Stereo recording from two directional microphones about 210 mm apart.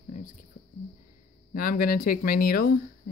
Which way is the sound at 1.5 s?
45° left (ahead or behind).